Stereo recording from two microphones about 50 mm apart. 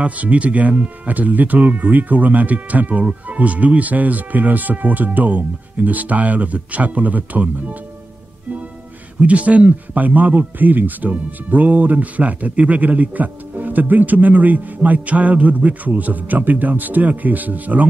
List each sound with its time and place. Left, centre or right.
0.0 s speech: right
9.2 s speech: right